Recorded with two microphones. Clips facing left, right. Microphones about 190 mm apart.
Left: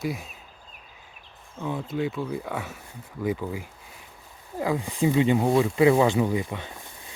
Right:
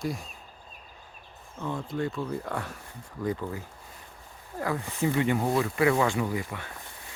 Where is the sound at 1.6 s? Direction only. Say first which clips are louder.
Left 3 dB; 10° left (ahead or behind).